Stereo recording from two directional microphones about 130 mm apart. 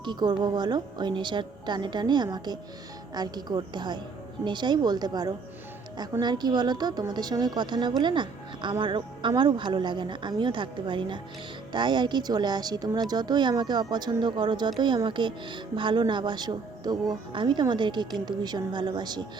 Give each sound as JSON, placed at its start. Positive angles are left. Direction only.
{"t": 0.0, "sound": "speech", "side_deg": -35}